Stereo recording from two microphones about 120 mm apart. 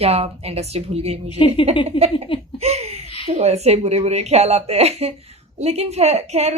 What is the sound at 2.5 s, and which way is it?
A woman's voice, 65° right (ahead or behind).